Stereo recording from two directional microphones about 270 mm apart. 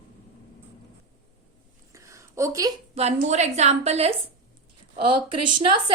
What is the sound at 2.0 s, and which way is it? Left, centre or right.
A woman's voice, centre.